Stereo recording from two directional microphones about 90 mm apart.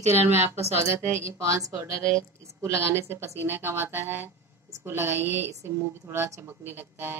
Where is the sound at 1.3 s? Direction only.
35° right (ahead or behind).